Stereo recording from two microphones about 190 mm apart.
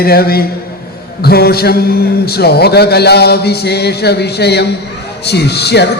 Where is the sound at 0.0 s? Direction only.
55° left (ahead or behind).